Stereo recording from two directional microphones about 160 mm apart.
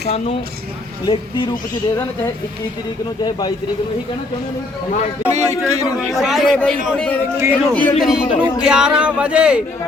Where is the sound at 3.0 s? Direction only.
30° left (ahead or behind).